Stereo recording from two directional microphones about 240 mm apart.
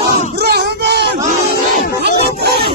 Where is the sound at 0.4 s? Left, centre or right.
Right.